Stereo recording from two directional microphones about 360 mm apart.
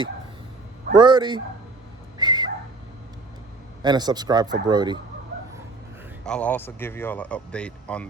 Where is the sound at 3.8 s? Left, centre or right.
Centre.